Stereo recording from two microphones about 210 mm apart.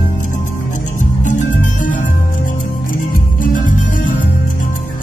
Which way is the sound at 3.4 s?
40° left (ahead or behind).